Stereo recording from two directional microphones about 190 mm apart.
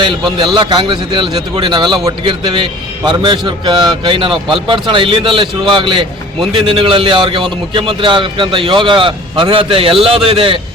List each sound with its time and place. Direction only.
0.0 s a man's voice: 25° right (ahead or behind)